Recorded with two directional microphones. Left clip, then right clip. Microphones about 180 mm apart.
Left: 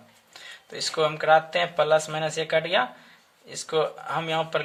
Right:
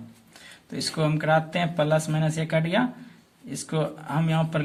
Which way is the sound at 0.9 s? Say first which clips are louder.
Left 4 dB; 40° left (ahead or behind).